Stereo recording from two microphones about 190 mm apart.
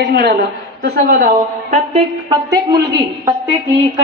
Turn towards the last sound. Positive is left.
turn(degrees=-15)  # may be behind; listen again after turning